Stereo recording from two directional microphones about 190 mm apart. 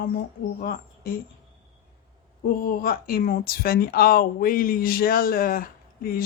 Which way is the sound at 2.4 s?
50° left (ahead or behind).